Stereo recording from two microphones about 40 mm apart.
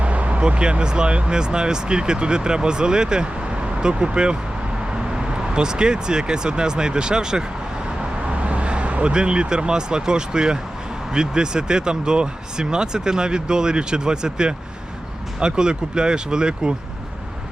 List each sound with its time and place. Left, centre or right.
0.0 s speech: right; by 7.4 s centre
8.4 s vehicle: right
9.1 s speech: right